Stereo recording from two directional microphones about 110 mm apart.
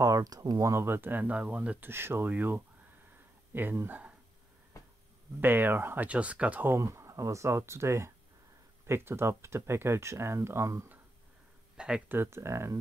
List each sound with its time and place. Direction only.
0.0 s speech: 30° right (ahead or behind)
5.4 s speech: 20° right (ahead or behind)
11.7 s a sound: 5° right (ahead or behind)
12.1 s speech: 20° right (ahead or behind)